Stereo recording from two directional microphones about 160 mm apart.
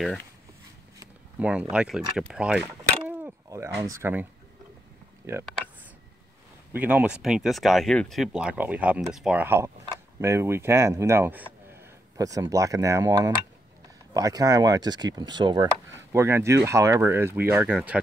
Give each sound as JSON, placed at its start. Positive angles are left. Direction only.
{"t": 1.4, "sound": "speech", "side_deg": -5}
{"t": 2.8, "sound": "a sound", "side_deg": -10}
{"t": 3.8, "sound": "speech", "side_deg": -15}
{"t": 6.7, "sound": "speech", "side_deg": -10}
{"t": 16.1, "sound": "speech", "side_deg": -15}